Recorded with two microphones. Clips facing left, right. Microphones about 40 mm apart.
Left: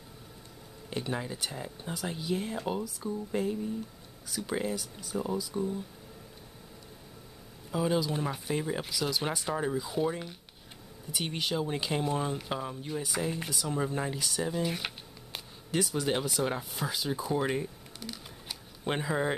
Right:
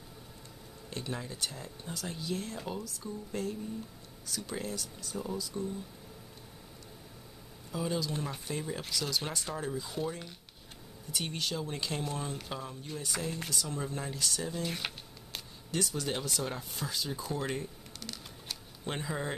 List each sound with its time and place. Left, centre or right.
0.8 s speech: left
5.5 s speech: left
7.7 s speech: centre
15.3 s a sound: centre
16.7 s speech: centre